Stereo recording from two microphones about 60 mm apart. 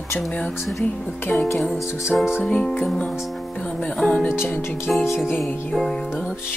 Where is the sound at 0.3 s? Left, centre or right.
Centre.